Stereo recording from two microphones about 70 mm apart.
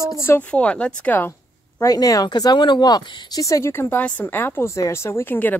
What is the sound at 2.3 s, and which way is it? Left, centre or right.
Speech, left.